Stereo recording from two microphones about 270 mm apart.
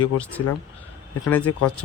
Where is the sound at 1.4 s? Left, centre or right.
Left.